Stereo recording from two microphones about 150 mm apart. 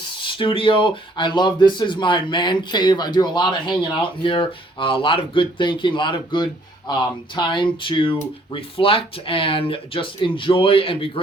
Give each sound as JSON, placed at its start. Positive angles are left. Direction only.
{"t": 0.2, "sound": "speech", "side_deg": 35}